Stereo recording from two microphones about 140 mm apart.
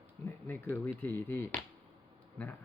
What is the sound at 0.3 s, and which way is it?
Speech, 15° left (ahead or behind).